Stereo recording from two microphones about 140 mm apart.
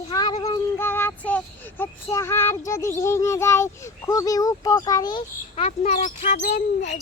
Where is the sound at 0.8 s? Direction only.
15° left (ahead or behind).